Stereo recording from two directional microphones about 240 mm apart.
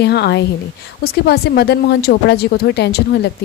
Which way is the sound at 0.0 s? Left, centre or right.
Left.